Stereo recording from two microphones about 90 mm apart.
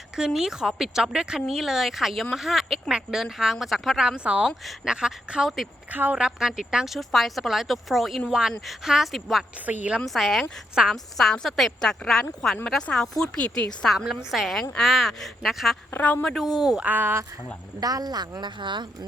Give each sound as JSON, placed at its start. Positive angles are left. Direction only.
{"t": 0.2, "sound": "speech", "side_deg": -5}
{"t": 5.9, "sound": "a woman's voice", "side_deg": -20}
{"t": 6.2, "sound": "speech", "side_deg": -5}
{"t": 9.6, "sound": "speech", "side_deg": -15}
{"t": 10.0, "sound": "speech", "side_deg": 0}
{"t": 13.8, "sound": "speech", "side_deg": 0}
{"t": 15.9, "sound": "a woman's voice", "side_deg": 20}
{"t": 16.2, "sound": "speech", "side_deg": 5}
{"t": 16.6, "sound": "speech", "side_deg": -10}
{"t": 16.9, "sound": "a woman's voice", "side_deg": -20}
{"t": 17.7, "sound": "speech", "side_deg": -45}